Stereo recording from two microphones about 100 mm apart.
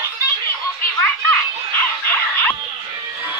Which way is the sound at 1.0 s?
15° left (ahead or behind).